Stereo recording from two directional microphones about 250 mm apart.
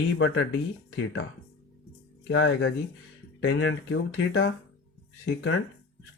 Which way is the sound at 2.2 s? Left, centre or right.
Left.